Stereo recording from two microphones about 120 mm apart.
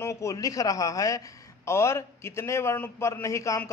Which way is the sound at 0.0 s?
25° left (ahead or behind).